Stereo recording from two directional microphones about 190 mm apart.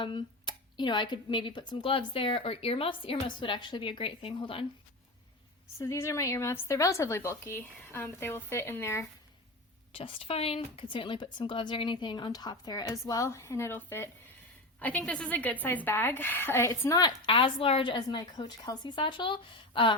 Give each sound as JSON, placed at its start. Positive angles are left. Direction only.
{"t": 0.0, "sound": "a woman's voice", "side_deg": 25}
{"t": 5.8, "sound": "a woman's voice", "side_deg": 15}
{"t": 9.9, "sound": "a woman's voice", "side_deg": 30}